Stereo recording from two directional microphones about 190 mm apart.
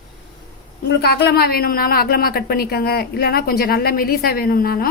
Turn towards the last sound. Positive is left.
turn(degrees=50)  # may be behind; listen again after turning